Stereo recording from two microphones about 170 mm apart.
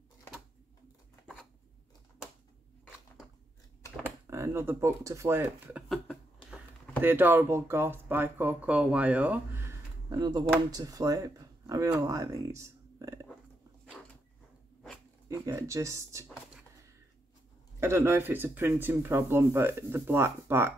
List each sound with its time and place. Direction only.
4.0 s speech: 15° right (ahead or behind)
7.0 s speech: 10° right (ahead or behind)
15.2 s speech: 15° right (ahead or behind)
17.7 s speech: 15° right (ahead or behind)